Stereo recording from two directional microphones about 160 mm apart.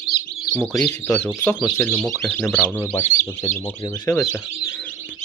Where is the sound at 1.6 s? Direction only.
5° right (ahead or behind).